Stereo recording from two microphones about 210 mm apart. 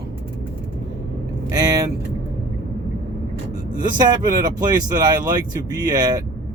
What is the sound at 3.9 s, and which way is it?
Speech, 20° right (ahead or behind).